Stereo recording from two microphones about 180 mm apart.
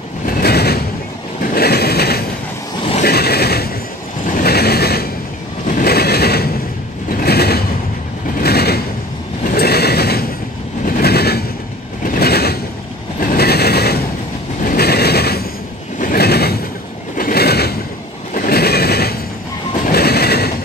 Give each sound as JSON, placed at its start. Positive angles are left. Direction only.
{"t": 0.3, "sound": "vehicle", "side_deg": 60}
{"t": 1.4, "sound": "a sound", "side_deg": 60}
{"t": 4.3, "sound": "vehicle", "side_deg": 60}
{"t": 5.7, "sound": "a sound", "side_deg": 55}
{"t": 7.1, "sound": "vehicle", "side_deg": 60}
{"t": 8.4, "sound": "a sound", "side_deg": 60}
{"t": 12.0, "sound": "vehicle", "side_deg": 55}
{"t": 13.2, "sound": "mechanisms", "side_deg": 55}
{"t": 16.0, "sound": "train", "side_deg": 55}
{"t": 17.2, "sound": "a sound", "side_deg": 60}
{"t": 18.3, "sound": "neigh", "side_deg": 55}
{"t": 19.8, "sound": "train", "side_deg": 60}